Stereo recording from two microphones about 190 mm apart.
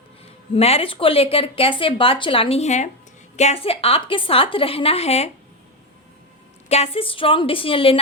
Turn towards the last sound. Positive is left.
turn(degrees=30)  # may be behind; listen again after turning